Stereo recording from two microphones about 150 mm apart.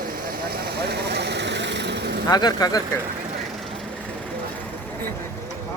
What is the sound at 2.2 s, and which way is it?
Speech, 25° left (ahead or behind).